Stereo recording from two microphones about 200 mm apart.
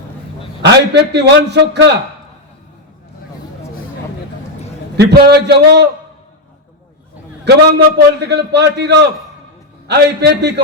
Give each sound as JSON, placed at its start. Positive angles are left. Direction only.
{"t": 0.6, "sound": "a man's voice", "side_deg": -60}
{"t": 4.9, "sound": "a man's voice", "side_deg": -55}
{"t": 7.4, "sound": "a man's voice", "side_deg": -55}